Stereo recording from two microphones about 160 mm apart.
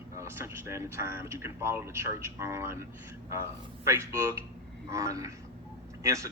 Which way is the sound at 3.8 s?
15° right (ahead or behind).